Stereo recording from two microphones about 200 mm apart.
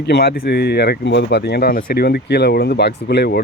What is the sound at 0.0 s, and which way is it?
Speech, 55° left (ahead or behind).